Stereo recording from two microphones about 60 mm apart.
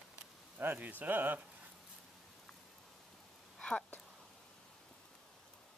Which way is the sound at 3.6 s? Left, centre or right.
Centre.